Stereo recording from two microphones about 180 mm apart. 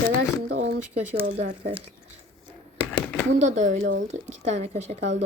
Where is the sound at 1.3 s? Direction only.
50° right (ahead or behind).